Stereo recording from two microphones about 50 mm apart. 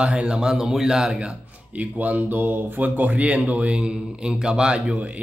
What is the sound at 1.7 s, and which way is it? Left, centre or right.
Speech, right.